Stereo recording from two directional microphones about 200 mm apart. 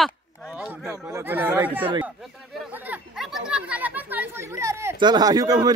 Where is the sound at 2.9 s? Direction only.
5° right (ahead or behind).